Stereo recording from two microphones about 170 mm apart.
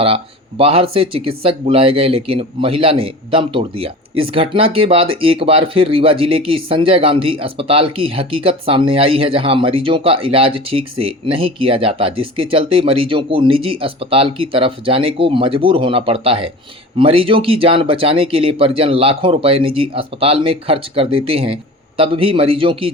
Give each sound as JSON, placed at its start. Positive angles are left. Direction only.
{"t": 0.6, "sound": "speech", "side_deg": -35}